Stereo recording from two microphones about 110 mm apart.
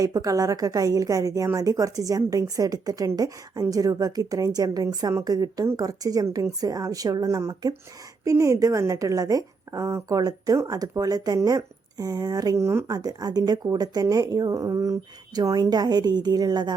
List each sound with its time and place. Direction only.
0.0 s a woman's voice: 30° right (ahead or behind)
13.0 s a woman's voice: 35° right (ahead or behind)